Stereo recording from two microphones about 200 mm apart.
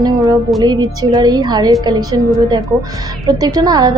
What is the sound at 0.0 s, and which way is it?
Music, 20° right (ahead or behind).